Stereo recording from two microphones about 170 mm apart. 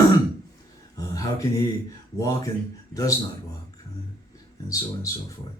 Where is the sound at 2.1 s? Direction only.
20° left (ahead or behind).